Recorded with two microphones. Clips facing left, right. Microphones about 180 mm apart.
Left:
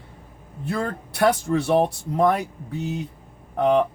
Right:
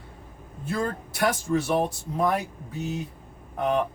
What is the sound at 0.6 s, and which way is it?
Speech, 65° left (ahead or behind).